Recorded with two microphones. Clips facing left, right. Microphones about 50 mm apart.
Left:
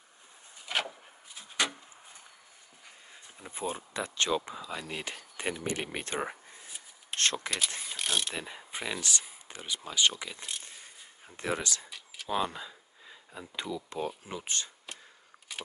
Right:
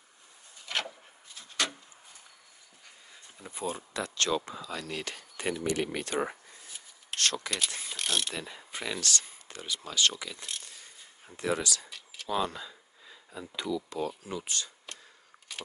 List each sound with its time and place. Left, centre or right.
0.7 s wood: centre
3.3 s speech: left
5.9 s speech: left
7.9 s pulleys: centre
8.4 s speech: centre
11.3 s speech: left
12.3 s a sound: centre
13.6 s speech: left
15.5 s a sound: centre